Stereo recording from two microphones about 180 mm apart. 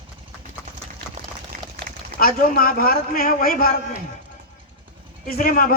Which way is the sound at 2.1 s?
55° left (ahead or behind).